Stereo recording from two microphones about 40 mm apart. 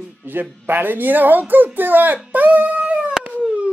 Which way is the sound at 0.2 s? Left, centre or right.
Right.